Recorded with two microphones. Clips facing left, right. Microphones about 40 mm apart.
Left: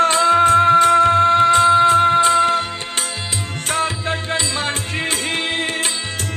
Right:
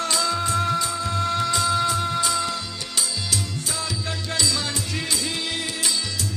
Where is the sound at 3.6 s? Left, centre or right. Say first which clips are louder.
Left 8 dB; left.